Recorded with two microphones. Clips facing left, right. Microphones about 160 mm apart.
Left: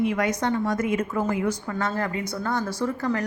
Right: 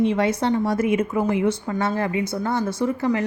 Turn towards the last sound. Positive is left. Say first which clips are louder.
# right 4 dB
turn(degrees=-20)  # may be behind; listen again after turning